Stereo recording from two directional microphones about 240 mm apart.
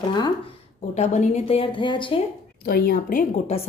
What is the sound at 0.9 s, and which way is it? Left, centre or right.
A woman's voice, left.